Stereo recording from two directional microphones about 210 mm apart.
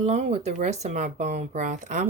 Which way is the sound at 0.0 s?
30° right (ahead or behind).